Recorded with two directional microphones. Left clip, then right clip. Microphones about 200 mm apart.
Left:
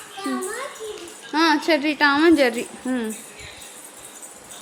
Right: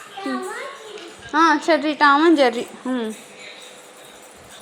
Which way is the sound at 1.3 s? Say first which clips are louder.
Right 3 dB; 15° left (ahead or behind).